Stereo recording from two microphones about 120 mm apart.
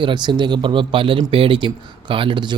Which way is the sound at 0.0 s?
40° right (ahead or behind).